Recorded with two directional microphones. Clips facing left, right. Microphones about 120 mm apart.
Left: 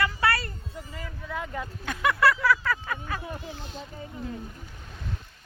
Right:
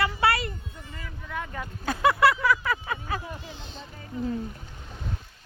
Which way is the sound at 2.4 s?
15° right (ahead or behind).